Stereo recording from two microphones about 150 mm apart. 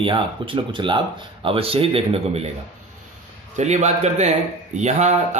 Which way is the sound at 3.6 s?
50° right (ahead or behind).